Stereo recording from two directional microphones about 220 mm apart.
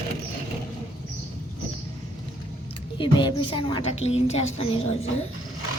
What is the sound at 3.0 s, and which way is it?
A woman's voice, 20° left (ahead or behind).